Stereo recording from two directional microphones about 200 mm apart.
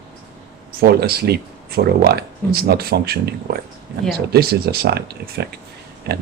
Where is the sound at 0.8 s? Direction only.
50° right (ahead or behind).